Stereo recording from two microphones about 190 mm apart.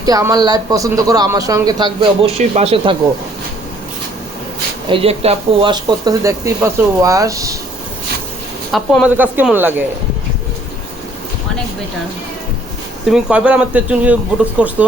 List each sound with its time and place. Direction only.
0.0 s a man's voice: 20° right (ahead or behind)
4.9 s speech: 30° right (ahead or behind)
8.7 s speech: centre (ahead or behind)
13.1 s speech: 5° right (ahead or behind)